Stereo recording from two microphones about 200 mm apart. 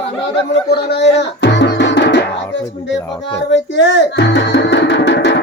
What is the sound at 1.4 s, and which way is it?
Music, 60° left (ahead or behind).